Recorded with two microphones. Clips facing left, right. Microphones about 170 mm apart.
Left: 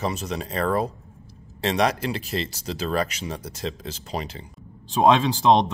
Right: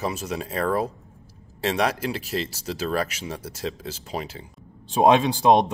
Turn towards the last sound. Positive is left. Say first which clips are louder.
# right 1 dB
turn(degrees=-15)  # may be behind; listen again after turning